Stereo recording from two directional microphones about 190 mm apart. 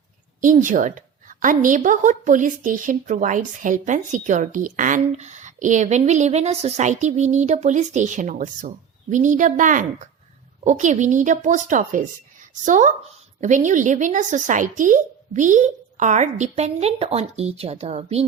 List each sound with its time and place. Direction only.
0.6 s a woman's voice: 45° right (ahead or behind)